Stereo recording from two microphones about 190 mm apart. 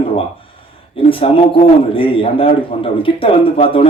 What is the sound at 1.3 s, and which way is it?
A man's voice, 30° left (ahead or behind).